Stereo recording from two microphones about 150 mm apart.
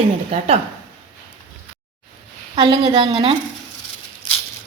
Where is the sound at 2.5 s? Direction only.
30° right (ahead or behind).